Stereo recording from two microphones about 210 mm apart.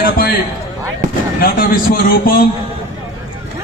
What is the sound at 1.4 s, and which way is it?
A man's voice, 45° left (ahead or behind).